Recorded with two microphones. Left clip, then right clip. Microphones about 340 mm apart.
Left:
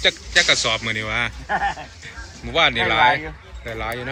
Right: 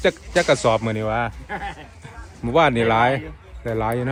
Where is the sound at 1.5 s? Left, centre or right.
Centre.